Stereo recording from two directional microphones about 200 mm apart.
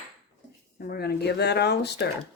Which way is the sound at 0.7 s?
50° left (ahead or behind).